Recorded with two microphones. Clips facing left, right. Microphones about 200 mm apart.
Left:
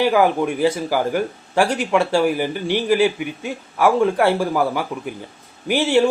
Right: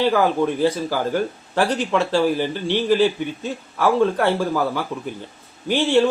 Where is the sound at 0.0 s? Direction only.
15° left (ahead or behind).